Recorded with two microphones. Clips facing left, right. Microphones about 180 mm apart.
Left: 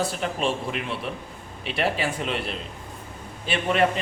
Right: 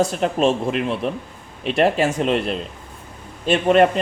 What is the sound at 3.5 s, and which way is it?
Speech, 40° right (ahead or behind).